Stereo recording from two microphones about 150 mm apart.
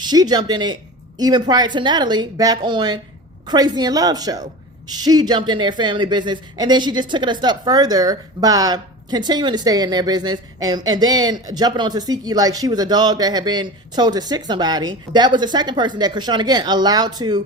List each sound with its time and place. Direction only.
0.0 s speech: 25° right (ahead or behind)